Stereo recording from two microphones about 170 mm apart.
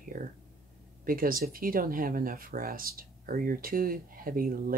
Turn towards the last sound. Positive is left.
turn(degrees=-55)  # may be behind; listen again after turning